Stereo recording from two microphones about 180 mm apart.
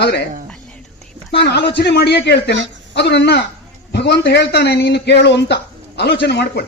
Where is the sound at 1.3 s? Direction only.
65° left (ahead or behind).